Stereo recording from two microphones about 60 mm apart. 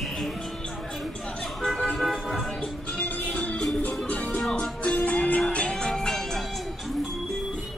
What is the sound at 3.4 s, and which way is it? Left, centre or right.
Music, centre.